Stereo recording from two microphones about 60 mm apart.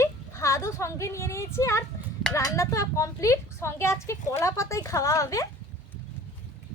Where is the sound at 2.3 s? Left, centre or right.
Left.